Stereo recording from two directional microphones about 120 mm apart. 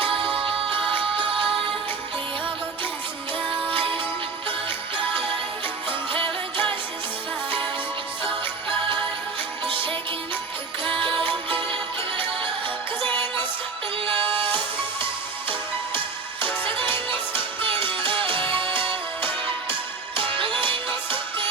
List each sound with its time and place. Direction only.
0.3 s music: 45° right (ahead or behind)
3.7 s music: 45° right (ahead or behind)
5.9 s music: 45° right (ahead or behind)
9.6 s music: 45° right (ahead or behind)
11.4 s music: 45° right (ahead or behind)
14.2 s music: 45° right (ahead or behind)